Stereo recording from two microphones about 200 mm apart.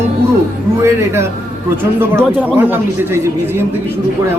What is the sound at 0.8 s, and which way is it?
Speech, 15° right (ahead or behind).